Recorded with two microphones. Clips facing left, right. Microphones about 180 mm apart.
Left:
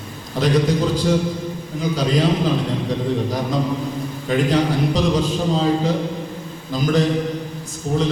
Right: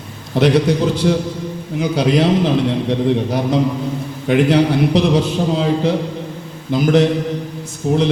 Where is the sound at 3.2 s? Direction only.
65° right (ahead or behind).